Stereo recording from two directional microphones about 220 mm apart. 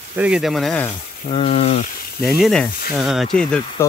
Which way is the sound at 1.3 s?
25° left (ahead or behind).